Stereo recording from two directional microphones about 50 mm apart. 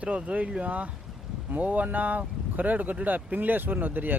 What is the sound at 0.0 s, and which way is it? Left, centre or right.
Speech, right.